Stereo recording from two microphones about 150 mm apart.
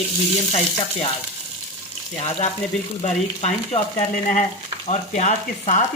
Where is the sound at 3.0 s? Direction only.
45° left (ahead or behind).